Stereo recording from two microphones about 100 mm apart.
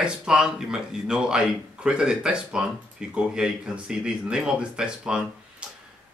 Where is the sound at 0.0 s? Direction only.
10° right (ahead or behind).